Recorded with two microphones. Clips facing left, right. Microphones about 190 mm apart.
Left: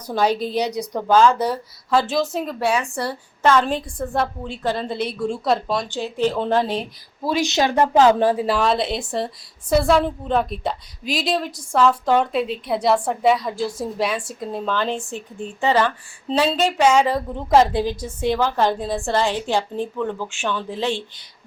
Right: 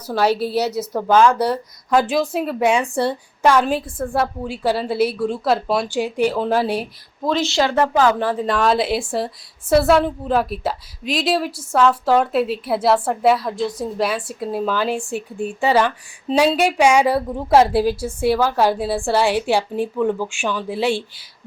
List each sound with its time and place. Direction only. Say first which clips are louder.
0.1 s a woman's voice: right 2 dB; 5° right (ahead or behind)
2.1 s a woman's voice: right 2 dB; 5° right (ahead or behind)
2.6 s a woman's voice: right 4 dB; 20° right (ahead or behind)
2.8 s a woman's voice: right 6 dB; 30° right (ahead or behind)
3.4 s a woman's voice: right 2 dB; 10° right (ahead or behind)
7.3 s a woman's voice: right 1 dB; 15° left (ahead or behind)
8.4 s a woman's voice: right 2 dB; centre (ahead or behind)